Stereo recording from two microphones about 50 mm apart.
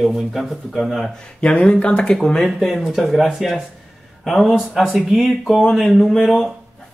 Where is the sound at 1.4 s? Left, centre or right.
Left.